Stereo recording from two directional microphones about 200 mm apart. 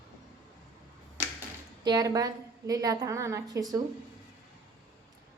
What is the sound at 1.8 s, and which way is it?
A woman's voice, 20° right (ahead or behind).